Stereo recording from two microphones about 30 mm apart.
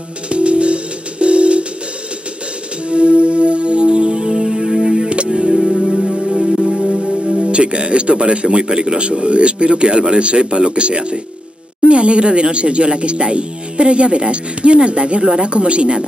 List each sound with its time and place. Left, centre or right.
0.3 s music: right
2.9 s music: right
5.1 s music: right
5.5 s music: centre
7.5 s speech: right